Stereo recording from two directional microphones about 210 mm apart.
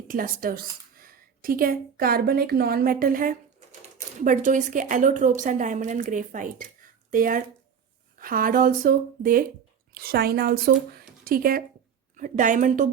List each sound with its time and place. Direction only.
0.1 s a woman's voice: 40° right (ahead or behind)